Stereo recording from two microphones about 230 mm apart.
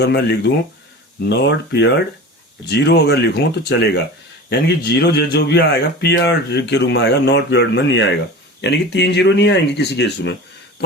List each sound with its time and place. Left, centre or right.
0.0 s speech: left